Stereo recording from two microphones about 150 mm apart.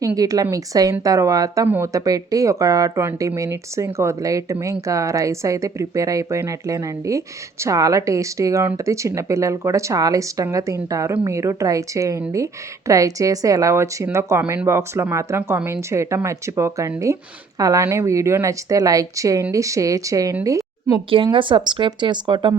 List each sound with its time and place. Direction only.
0.0 s speech: 25° right (ahead or behind)
20.4 s a sound: 20° right (ahead or behind)
21.3 s speech: 30° right (ahead or behind)